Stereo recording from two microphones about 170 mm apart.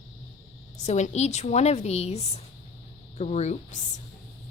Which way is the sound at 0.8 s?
40° left (ahead or behind).